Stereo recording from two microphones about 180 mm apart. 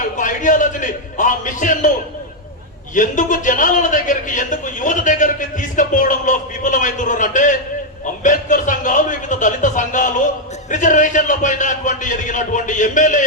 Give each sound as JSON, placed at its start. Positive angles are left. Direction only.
{"t": 0.2, "sound": "a man's voice", "side_deg": 45}
{"t": 2.9, "sound": "a man's voice", "side_deg": 45}